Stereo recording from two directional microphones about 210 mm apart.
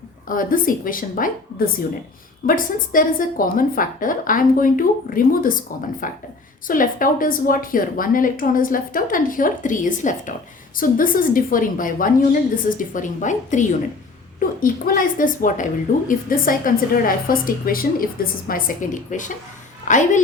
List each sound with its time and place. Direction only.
0.3 s a woman's voice: 40° left (ahead or behind)